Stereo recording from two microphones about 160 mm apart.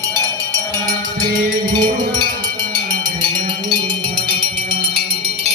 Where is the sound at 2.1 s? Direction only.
25° right (ahead or behind).